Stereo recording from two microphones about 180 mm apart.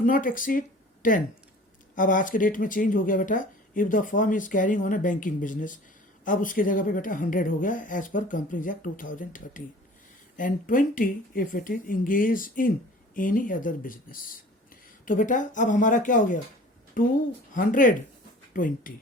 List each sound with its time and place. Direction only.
0.0 s speech: 50° left (ahead or behind)